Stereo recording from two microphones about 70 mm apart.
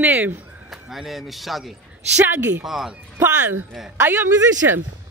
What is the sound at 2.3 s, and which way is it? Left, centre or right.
Speech, right.